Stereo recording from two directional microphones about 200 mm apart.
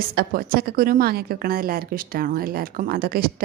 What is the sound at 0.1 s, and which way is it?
A woman's voice, 50° right (ahead or behind).